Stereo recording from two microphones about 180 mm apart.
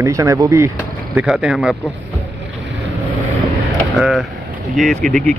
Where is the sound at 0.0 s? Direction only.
15° right (ahead or behind).